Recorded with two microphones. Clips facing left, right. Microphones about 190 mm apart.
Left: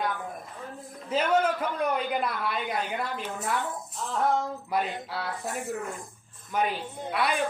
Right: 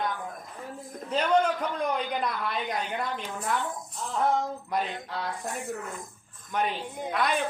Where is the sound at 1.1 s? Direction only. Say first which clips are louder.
Even; 5° left (ahead or behind).